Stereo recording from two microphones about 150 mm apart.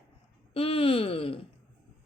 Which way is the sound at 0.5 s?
40° left (ahead or behind).